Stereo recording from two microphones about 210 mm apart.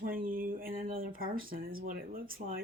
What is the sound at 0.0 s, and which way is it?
Speech, 45° right (ahead or behind).